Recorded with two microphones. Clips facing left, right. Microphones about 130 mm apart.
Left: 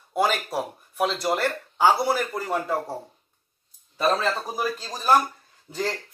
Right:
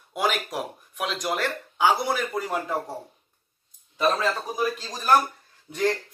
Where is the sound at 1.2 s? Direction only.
10° left (ahead or behind).